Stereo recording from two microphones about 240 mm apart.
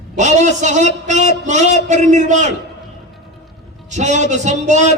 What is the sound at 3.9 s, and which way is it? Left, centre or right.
Speech, right.